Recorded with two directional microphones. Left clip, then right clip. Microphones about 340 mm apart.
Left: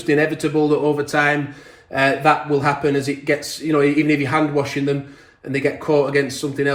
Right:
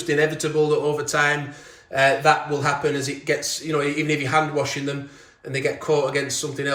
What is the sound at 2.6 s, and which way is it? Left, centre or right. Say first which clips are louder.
Speech: left 4 dB; centre.